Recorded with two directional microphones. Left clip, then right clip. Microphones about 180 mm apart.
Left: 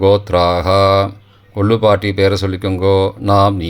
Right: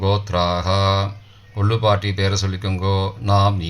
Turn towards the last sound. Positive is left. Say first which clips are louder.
# left 7 dB
turn(degrees=50)  # may be behind; listen again after turning